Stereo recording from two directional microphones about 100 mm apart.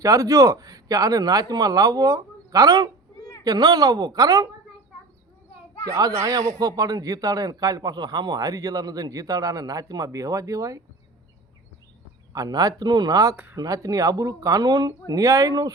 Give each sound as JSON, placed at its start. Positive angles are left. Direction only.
{"t": 0.0, "sound": "a man's voice", "side_deg": -35}
{"t": 6.0, "sound": "a man's voice", "side_deg": -35}
{"t": 12.3, "sound": "a man's voice", "side_deg": -40}
{"t": 13.3, "sound": "speech", "side_deg": -15}
{"t": 13.6, "sound": "a man's voice", "side_deg": -35}